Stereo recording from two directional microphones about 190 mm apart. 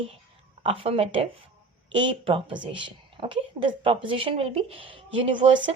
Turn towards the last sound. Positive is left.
turn(degrees=-30)  # may be behind; listen again after turning